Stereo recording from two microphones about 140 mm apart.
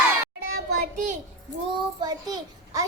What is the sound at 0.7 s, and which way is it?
Child singing, 60° right (ahead or behind).